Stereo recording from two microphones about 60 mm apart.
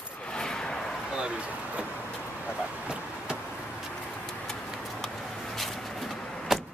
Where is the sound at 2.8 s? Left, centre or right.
Centre.